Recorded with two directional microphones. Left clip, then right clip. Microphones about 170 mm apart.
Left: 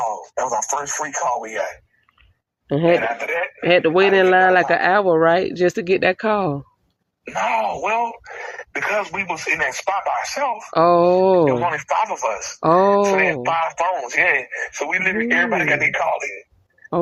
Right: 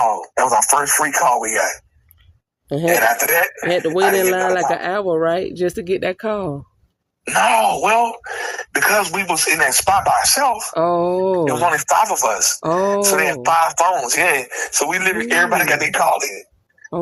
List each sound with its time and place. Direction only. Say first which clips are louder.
0.3 s speech: right 7 dB; 55° right (ahead or behind)
1.4 s speech: right 6 dB; 35° right (ahead or behind)
2.6 s speech: left 1 dB; 20° left (ahead or behind)
3.0 s speech: right 7 dB; 35° right (ahead or behind)
3.6 s speech: left 2 dB; 20° left (ahead or behind)
7.3 s speech: right 6 dB; 30° right (ahead or behind)
10.8 s speech: left 6 dB; 15° left (ahead or behind)
11.4 s speech: right 2 dB; 30° right (ahead or behind)
12.6 s speech: left 5 dB; 20° left (ahead or behind)
13.1 s speech: right 3 dB; 30° right (ahead or behind)